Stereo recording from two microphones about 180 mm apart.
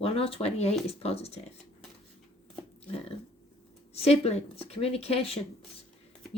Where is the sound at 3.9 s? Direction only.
35° left (ahead or behind).